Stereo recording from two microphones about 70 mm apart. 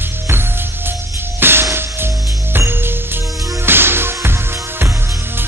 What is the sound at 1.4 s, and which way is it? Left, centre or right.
Music, right.